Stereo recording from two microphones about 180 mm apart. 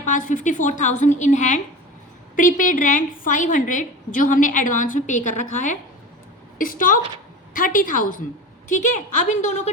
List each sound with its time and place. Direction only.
0.0 s a woman's voice: 45° left (ahead or behind)